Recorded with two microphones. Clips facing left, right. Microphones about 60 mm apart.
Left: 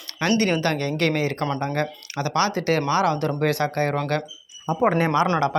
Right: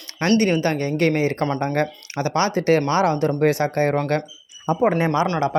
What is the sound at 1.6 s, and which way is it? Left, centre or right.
Speech, right.